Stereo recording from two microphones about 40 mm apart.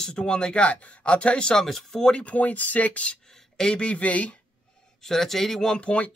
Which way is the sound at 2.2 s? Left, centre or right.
Left.